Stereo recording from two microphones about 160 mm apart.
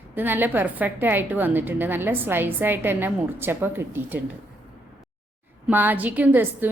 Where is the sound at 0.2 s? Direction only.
10° right (ahead or behind).